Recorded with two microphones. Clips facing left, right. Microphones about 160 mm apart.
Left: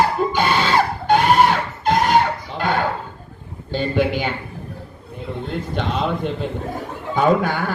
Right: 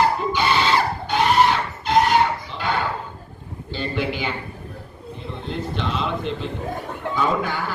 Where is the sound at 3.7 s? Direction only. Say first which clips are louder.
Left 6 dB; 50° left (ahead or behind).